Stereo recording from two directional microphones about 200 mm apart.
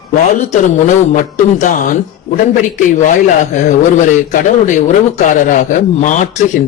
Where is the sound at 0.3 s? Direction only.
40° left (ahead or behind).